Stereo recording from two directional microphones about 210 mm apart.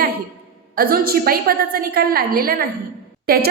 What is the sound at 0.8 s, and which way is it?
A woman's voice, 45° right (ahead or behind).